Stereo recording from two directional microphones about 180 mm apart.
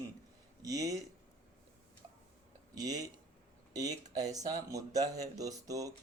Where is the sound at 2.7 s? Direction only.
20° right (ahead or behind).